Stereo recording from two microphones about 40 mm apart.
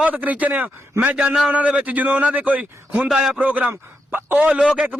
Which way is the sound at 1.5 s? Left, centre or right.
Right.